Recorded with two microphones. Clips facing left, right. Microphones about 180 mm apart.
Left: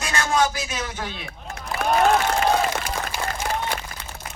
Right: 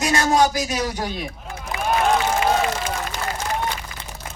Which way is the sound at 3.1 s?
10° left (ahead or behind).